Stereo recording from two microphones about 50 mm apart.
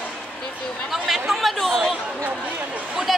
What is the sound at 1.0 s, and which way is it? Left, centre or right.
Speech, centre.